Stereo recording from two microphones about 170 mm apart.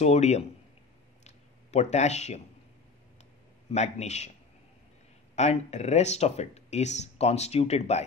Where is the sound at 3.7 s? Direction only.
40° left (ahead or behind).